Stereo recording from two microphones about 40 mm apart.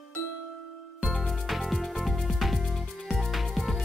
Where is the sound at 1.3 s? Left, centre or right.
Centre.